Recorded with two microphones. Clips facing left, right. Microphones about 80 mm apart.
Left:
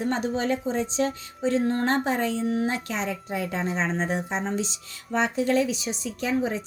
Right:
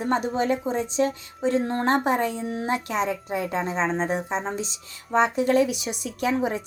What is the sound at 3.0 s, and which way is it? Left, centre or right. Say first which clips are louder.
Speech: right 2 dB; right.